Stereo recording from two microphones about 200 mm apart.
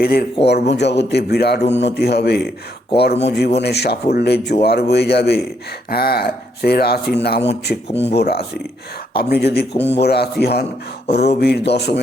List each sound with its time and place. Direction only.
0.0 s a man's voice: 50° left (ahead or behind)
7.9 s speech: 30° left (ahead or behind)
8.1 s a man's voice: 55° left (ahead or behind)